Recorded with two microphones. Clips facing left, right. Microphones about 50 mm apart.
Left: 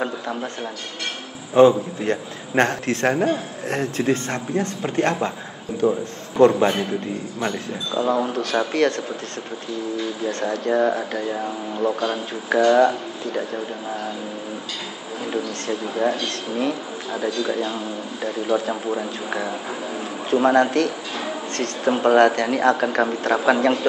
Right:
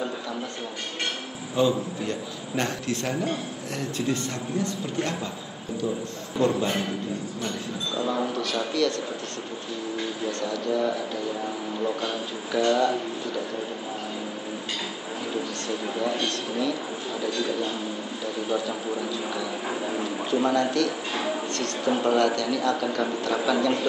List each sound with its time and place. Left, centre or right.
1.5 s a man's voice: left
10.2 s a man's voice: left
16.0 s a man's voice: left